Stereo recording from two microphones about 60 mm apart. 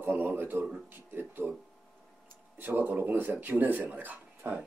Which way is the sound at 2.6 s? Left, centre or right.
Right.